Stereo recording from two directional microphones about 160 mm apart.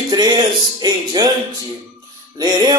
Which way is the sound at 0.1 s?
25° right (ahead or behind).